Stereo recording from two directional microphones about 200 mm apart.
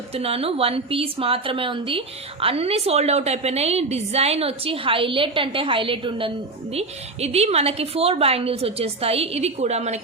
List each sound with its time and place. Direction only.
0.1 s a woman's voice: 30° right (ahead or behind)